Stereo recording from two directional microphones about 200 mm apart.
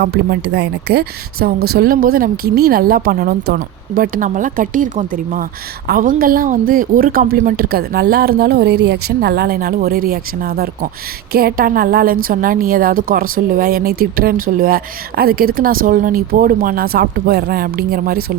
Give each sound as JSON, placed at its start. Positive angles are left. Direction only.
{"t": 0.0, "sound": "a woman's voice", "side_deg": -55}